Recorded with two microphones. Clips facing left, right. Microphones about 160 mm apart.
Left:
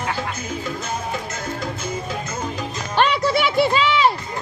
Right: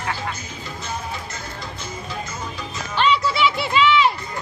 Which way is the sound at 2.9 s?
50° left (ahead or behind).